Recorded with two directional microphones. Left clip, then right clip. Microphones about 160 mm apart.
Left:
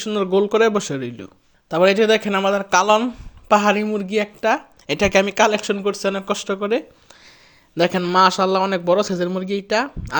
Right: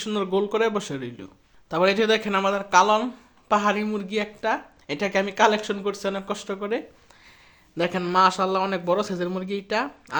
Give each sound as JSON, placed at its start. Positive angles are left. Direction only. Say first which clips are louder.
{"t": 0.0, "sound": "a man's voice", "louder": "left 6 dB", "side_deg": 30}